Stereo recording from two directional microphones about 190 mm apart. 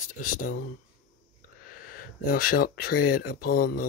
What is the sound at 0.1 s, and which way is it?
Speech, 45° left (ahead or behind).